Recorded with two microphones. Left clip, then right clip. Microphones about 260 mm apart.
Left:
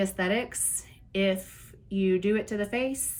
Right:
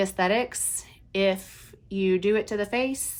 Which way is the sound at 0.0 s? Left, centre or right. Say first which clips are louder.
Right 4 dB; right.